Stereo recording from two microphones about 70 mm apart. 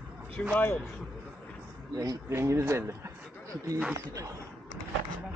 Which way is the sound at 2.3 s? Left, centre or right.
Right.